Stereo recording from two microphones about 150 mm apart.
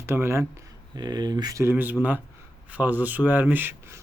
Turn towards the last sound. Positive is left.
turn(degrees=-10)  # may be behind; listen again after turning